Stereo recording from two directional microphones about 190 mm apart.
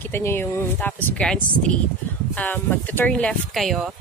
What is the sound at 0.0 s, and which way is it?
Speech, 10° left (ahead or behind).